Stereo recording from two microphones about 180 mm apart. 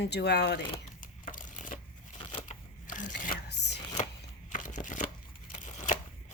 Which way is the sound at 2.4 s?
45° left (ahead or behind).